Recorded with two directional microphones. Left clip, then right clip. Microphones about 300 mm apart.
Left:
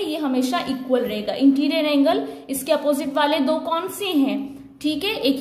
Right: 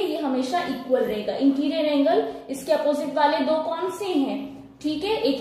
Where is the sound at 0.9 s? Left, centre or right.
Centre.